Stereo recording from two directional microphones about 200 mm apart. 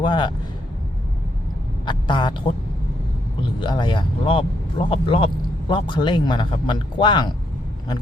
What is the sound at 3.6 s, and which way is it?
Speech, 25° left (ahead or behind).